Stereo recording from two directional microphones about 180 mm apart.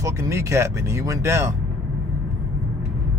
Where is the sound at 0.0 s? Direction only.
15° right (ahead or behind).